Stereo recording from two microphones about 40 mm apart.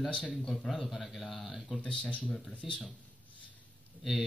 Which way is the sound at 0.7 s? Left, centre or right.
Centre.